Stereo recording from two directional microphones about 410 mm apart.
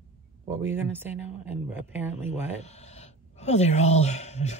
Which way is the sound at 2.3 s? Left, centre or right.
Centre.